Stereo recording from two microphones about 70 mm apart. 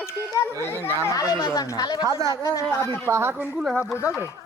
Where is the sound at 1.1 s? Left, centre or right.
Left.